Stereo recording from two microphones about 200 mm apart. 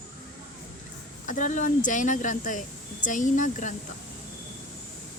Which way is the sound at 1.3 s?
40° left (ahead or behind).